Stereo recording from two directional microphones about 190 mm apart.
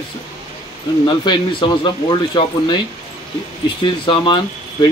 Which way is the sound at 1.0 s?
25° left (ahead or behind).